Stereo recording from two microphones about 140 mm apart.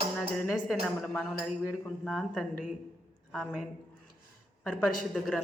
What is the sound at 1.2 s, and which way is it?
Speech, 5° right (ahead or behind).